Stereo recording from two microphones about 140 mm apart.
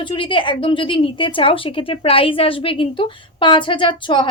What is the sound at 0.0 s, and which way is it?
A woman's voice, 35° left (ahead or behind).